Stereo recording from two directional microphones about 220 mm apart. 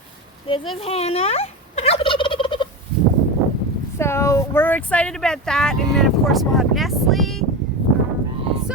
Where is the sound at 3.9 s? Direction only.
10° left (ahead or behind).